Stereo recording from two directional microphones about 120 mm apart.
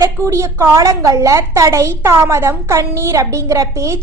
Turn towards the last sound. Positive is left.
turn(degrees=-25)  # may be behind; listen again after turning